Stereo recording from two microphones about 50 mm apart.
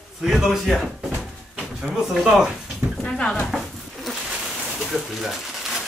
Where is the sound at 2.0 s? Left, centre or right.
Centre.